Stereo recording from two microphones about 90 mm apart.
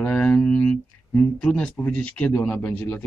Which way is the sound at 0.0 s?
15° left (ahead or behind).